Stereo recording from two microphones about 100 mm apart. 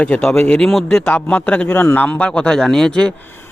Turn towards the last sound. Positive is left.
turn(degrees=5)  # may be behind; listen again after turning